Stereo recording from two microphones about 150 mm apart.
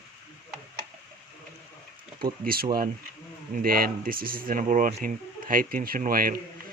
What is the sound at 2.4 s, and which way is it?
Speech, 80° right.